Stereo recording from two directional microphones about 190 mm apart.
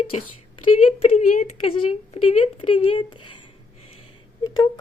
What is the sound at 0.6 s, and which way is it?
Speech, 30° left (ahead or behind).